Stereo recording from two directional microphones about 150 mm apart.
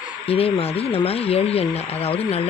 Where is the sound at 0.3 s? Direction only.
40° left (ahead or behind).